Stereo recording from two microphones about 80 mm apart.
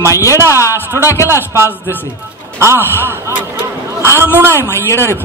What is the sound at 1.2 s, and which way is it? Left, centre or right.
A man's voice, right.